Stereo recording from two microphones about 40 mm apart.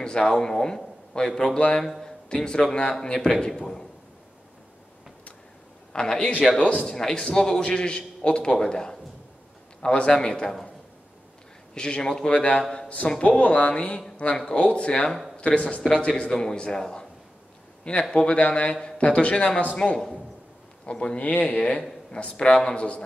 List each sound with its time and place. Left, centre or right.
0.0 s a man's voice: left
2.4 s a man's voice: centre
5.9 s a man's voice: centre
11.7 s a man's voice: left
16.2 s a man's voice: centre
18.1 s a man's voice: left
21.3 s a man's voice: left